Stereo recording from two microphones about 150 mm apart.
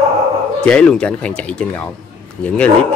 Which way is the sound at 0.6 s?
5° left (ahead or behind).